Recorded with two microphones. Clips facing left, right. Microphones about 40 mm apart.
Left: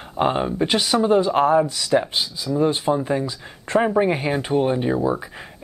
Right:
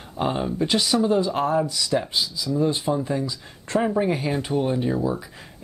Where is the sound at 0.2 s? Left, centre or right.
Left.